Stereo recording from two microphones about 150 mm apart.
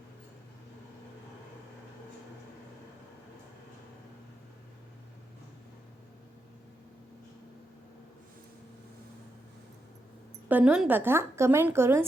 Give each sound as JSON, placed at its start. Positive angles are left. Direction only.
{"t": 10.5, "sound": "a woman's voice", "side_deg": -5}